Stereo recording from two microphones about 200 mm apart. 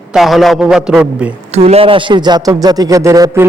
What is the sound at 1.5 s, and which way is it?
A man's voice, 30° right (ahead or behind).